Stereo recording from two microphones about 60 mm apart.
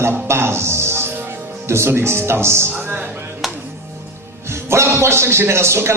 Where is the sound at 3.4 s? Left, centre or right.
Centre.